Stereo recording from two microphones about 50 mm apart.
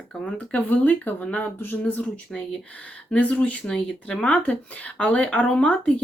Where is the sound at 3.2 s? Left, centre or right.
Left.